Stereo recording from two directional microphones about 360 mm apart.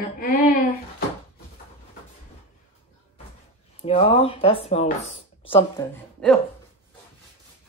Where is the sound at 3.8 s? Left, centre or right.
Centre.